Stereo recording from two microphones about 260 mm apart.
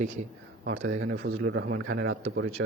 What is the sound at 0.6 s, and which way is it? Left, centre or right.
A man's voice, right.